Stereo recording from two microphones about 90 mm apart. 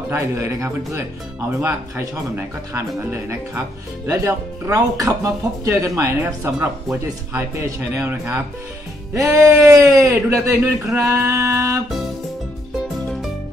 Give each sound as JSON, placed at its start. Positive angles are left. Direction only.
{"t": 0.1, "sound": "speech", "side_deg": -35}
{"t": 4.1, "sound": "speech", "side_deg": -35}
{"t": 8.0, "sound": "speech", "side_deg": -25}
{"t": 9.1, "sound": "speech", "side_deg": -35}